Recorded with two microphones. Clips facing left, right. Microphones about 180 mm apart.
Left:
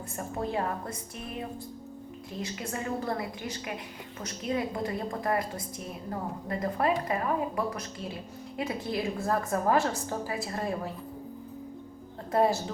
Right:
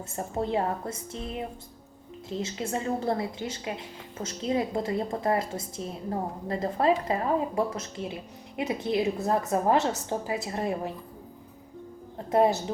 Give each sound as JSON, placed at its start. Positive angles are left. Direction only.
{"t": 0.2, "sound": "a woman's voice", "side_deg": -25}
{"t": 12.3, "sound": "a woman's voice", "side_deg": -20}